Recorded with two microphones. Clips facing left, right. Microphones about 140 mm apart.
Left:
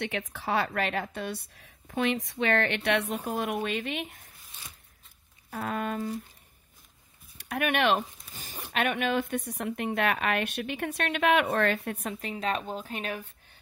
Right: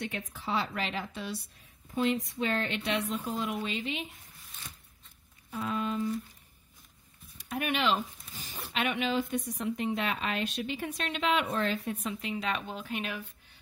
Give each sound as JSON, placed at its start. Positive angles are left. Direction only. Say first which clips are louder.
{"t": 0.0, "sound": "speech", "louder": "left 4 dB", "side_deg": 80}
{"t": 5.5, "sound": "speech", "louder": "left 1 dB", "side_deg": 55}
{"t": 7.3, "sound": "speech", "louder": "left 4 dB", "side_deg": 65}